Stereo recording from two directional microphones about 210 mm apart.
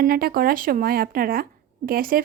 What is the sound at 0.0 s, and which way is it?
A woman's voice, 45° right (ahead or behind).